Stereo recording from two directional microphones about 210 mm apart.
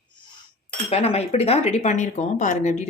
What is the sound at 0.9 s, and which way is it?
Speech, 30° left (ahead or behind).